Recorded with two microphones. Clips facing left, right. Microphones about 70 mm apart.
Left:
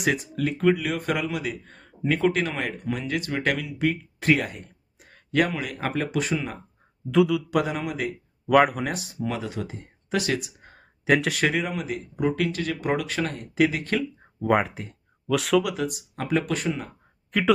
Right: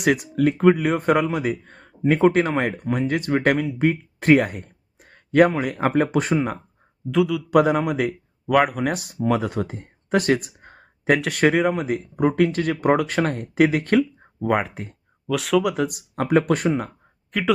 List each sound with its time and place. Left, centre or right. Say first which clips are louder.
0.1 s speech: right 7 dB; right
7.1 s speech: even; centre
7.5 s speech: right 8 dB; right
8.4 s speech: even; centre
9.2 s speech: right 8 dB; right
11.1 s speech: right 2 dB; centre
11.4 s speech: right 7 dB; right
14.4 s speech: even; centre
15.6 s speech: right 5 dB; right
17.3 s speech: even; centre